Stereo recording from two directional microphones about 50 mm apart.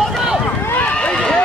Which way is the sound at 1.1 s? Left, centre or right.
Centre.